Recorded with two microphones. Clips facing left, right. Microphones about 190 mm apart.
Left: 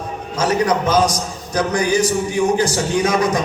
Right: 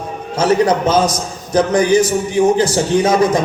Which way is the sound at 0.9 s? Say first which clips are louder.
Right 2 dB; 25° right (ahead or behind).